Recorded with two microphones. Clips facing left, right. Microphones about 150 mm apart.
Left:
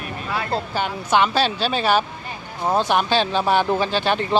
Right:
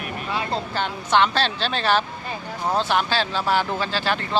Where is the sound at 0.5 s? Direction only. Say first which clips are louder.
Left 2 dB; 10° left (ahead or behind).